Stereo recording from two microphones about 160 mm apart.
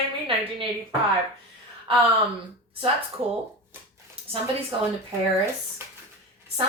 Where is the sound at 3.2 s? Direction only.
35° right (ahead or behind).